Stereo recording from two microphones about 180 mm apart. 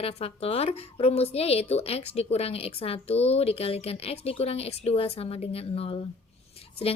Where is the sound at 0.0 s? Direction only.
35° left (ahead or behind).